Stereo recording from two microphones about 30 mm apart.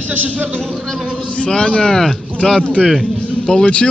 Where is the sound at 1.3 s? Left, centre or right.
Left.